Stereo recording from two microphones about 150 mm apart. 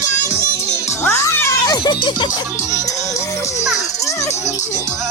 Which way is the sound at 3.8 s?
20° left (ahead or behind).